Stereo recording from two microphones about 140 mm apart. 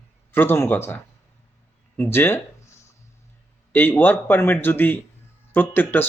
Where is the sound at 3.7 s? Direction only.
15° left (ahead or behind).